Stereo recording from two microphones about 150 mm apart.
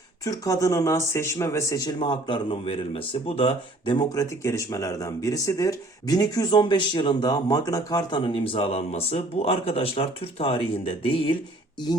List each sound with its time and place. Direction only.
0.3 s speech: 20° left (ahead or behind)